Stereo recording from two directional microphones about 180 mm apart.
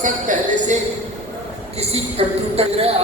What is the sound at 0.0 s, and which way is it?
Speech, 45° right (ahead or behind).